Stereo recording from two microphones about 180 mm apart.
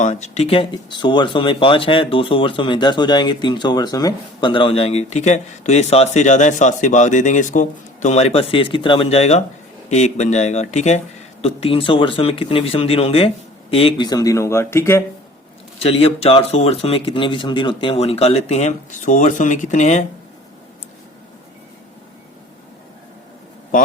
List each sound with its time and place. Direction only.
0.0 s speech: 40° left (ahead or behind); by 15.0 s 15° left (ahead or behind)
15.8 s speech: 35° left (ahead or behind)